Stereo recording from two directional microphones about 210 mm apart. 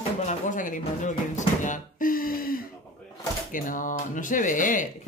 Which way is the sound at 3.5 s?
40° left (ahead or behind).